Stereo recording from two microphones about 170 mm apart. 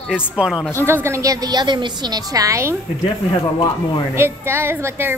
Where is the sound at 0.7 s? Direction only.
15° right (ahead or behind).